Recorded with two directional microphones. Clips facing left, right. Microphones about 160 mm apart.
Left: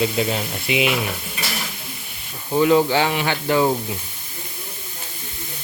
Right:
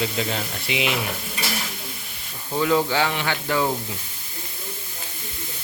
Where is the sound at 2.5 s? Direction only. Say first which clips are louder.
Left 5 dB; 20° left (ahead or behind).